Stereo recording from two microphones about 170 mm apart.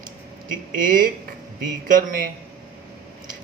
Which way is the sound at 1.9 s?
50° right (ahead or behind).